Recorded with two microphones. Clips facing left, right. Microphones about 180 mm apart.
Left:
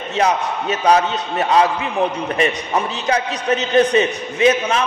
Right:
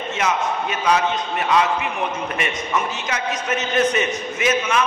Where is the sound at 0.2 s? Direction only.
35° left (ahead or behind).